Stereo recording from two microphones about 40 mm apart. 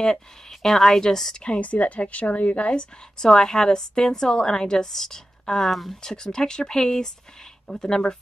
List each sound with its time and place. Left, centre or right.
0.0 s a woman's voice: centre
1.4 s a woman's voice: left
3.3 s a woman's voice: centre